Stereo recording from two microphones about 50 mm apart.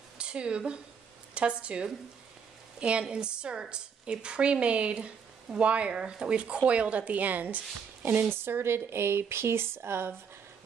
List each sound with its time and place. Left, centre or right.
0.2 s a woman's voice: right